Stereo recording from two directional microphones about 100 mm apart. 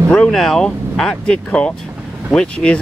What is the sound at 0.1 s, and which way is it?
Speech, 5° left (ahead or behind).